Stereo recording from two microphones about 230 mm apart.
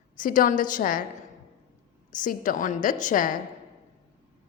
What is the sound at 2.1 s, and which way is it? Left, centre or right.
A woman's voice, left.